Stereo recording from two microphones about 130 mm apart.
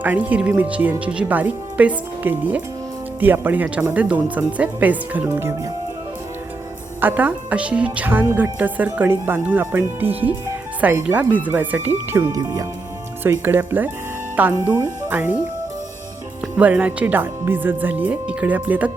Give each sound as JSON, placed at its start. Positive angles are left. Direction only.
{"t": 0.0, "sound": "speech", "side_deg": -10}
{"t": 7.0, "sound": "speech", "side_deg": -15}
{"t": 16.6, "sound": "speech", "side_deg": -10}